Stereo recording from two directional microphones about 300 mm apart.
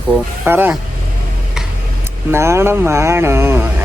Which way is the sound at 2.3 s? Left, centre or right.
Centre.